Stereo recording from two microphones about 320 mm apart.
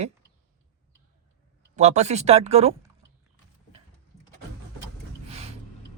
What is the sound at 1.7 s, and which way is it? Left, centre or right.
Speech, right.